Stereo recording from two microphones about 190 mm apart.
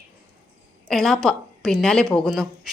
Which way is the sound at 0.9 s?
Centre (ahead or behind).